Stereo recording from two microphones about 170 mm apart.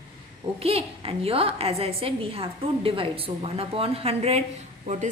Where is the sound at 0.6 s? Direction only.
35° right (ahead or behind).